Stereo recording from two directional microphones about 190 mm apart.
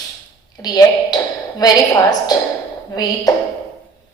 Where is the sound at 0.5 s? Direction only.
20° left (ahead or behind).